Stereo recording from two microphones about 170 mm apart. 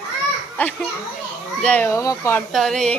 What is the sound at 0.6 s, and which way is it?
A child's voice, 10° left (ahead or behind).